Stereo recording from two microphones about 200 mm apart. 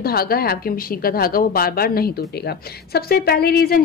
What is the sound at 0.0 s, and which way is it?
A woman's voice, 50° left (ahead or behind).